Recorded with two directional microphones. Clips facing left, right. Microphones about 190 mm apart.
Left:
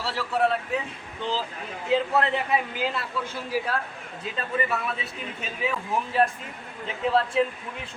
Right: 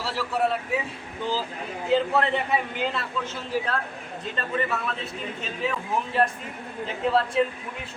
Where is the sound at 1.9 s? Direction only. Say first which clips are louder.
Right 1 dB; centre (ahead or behind).